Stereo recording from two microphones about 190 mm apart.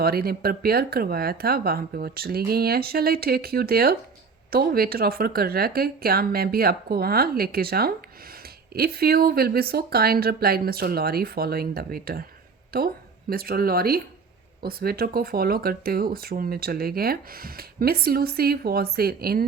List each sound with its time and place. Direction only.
0.0 s speech: 55° right (ahead or behind)